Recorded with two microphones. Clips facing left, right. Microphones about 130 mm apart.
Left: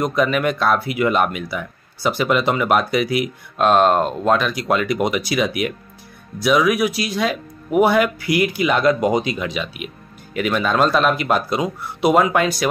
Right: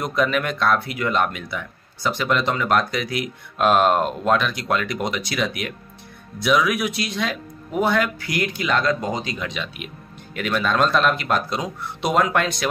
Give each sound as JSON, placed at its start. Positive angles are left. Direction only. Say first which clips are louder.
{"t": 0.0, "sound": "speech", "louder": "left 4 dB", "side_deg": 0}